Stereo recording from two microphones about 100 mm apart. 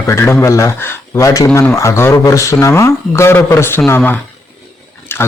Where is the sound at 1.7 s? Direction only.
30° left (ahead or behind).